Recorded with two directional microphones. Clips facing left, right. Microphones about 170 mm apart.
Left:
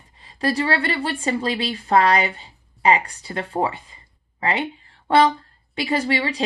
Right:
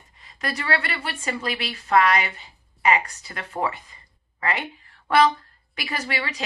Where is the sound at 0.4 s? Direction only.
30° left (ahead or behind).